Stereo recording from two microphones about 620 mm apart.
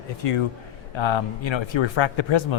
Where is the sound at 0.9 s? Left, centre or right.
Left.